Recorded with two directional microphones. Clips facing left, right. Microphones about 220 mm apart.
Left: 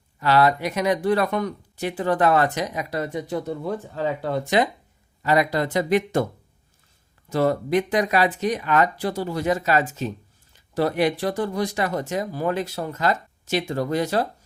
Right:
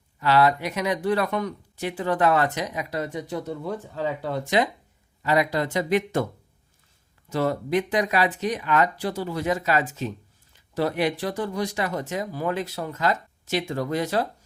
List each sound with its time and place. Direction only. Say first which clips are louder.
0.2 s speech: left 1 dB; 40° left (ahead or behind)
7.3 s speech: left 3 dB; 45° left (ahead or behind)